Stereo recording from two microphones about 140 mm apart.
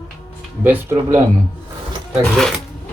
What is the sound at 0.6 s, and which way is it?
Speech, 10° right (ahead or behind).